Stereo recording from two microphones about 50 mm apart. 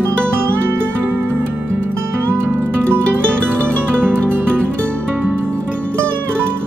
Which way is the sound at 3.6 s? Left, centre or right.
Right.